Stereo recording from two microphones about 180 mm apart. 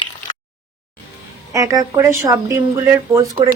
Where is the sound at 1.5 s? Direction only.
20° right (ahead or behind).